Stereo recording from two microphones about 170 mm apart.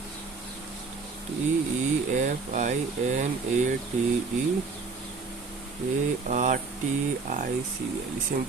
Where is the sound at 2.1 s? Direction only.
45° right (ahead or behind).